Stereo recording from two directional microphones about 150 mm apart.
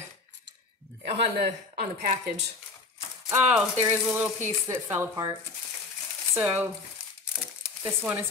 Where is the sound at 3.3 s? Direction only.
10° right (ahead or behind).